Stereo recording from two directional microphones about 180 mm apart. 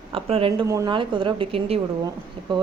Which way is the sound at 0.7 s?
20° right (ahead or behind).